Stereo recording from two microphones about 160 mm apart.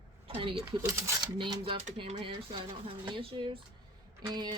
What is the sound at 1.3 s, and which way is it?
Speech, 30° right (ahead or behind).